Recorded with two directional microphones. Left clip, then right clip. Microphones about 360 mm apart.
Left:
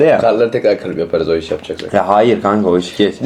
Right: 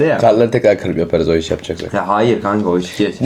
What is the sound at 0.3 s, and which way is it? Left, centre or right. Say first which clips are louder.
Speech: right 1 dB; right.